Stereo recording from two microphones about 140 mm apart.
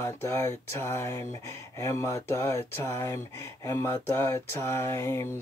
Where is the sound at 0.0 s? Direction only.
20° left (ahead or behind).